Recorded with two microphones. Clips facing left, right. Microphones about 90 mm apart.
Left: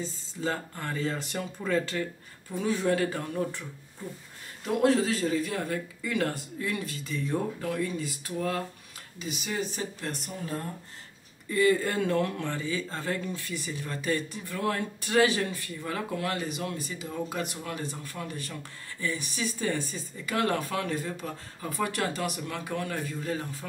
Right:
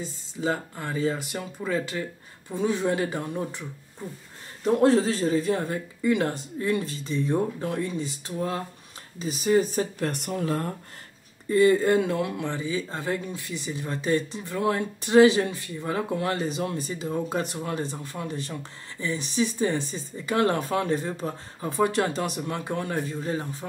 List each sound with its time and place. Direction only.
0.0 s speech: 15° right (ahead or behind)
4.6 s speech: 35° right (ahead or behind)
9.2 s speech: 40° right (ahead or behind); by 10.7 s 80° right
11.4 s speech: 30° right (ahead or behind)